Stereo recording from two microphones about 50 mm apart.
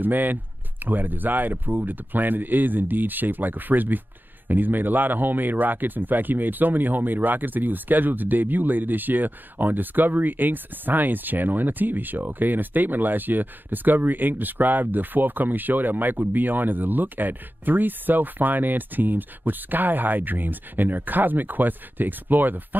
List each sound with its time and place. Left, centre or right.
0.0 s speech: right